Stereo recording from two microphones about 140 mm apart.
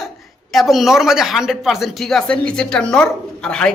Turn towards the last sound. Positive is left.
turn(degrees=5)  # may be behind; listen again after turning